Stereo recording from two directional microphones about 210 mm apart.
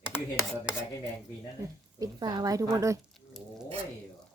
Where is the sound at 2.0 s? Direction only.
20° right (ahead or behind).